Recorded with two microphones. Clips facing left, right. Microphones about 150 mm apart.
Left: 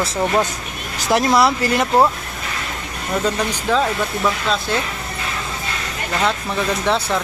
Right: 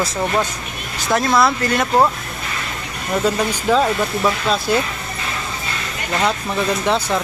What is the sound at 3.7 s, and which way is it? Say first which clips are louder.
Speech: right 3 dB; 10° right (ahead or behind).